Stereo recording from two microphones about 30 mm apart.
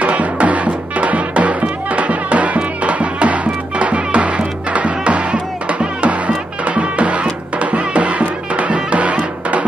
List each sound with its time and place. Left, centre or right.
0.0 s music: right